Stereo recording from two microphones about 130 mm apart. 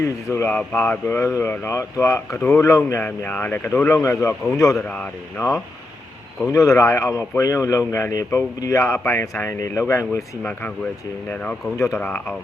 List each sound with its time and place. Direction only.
0.0 s speech: 20° left (ahead or behind)
6.5 s speech: 25° left (ahead or behind)
11.9 s speech: 15° left (ahead or behind)